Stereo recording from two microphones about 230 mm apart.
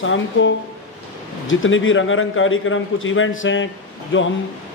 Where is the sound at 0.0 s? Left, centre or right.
Left.